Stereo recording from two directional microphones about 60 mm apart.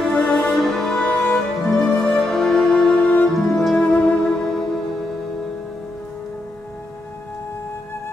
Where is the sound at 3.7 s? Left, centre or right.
Centre.